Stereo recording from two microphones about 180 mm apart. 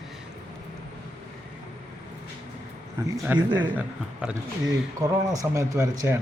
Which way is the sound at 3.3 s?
10° right (ahead or behind).